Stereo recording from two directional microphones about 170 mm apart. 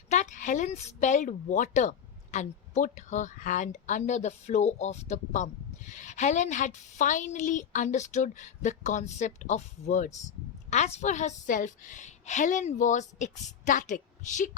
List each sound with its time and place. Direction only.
0.1 s a woman's voice: 45° left (ahead or behind)